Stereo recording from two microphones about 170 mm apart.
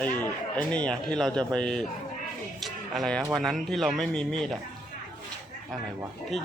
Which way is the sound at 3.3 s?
Centre (ahead or behind).